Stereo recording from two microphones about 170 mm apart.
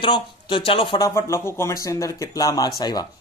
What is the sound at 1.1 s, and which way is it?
Speech, 15° left (ahead or behind).